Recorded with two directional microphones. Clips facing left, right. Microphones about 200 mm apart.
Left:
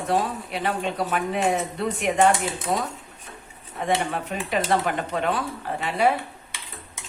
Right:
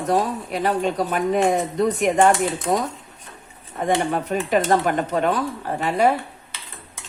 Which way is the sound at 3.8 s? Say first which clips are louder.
Right 4 dB; 40° right (ahead or behind).